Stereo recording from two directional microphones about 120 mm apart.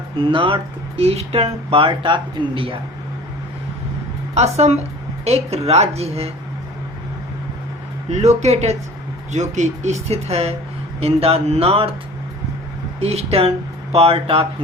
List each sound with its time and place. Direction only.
0.2 s speech: 45° right (ahead or behind)
4.4 s speech: 65° right (ahead or behind)
8.1 s speech: 70° right (ahead or behind)
9.3 s speech: 80° right; by 11.9 s 55° right (ahead or behind)
13.0 s speech: 60° right (ahead or behind)